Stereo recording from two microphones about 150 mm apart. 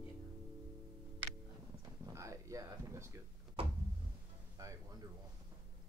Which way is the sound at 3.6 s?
40° right (ahead or behind).